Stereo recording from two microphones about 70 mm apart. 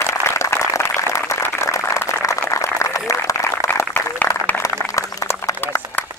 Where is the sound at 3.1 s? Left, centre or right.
Left.